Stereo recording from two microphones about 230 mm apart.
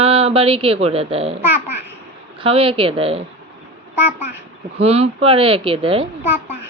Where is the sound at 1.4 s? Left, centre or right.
Centre.